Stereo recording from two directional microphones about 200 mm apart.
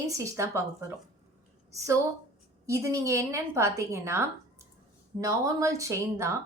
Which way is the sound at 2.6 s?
15° right (ahead or behind).